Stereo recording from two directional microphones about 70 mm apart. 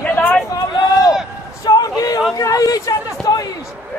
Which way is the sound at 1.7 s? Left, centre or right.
Left.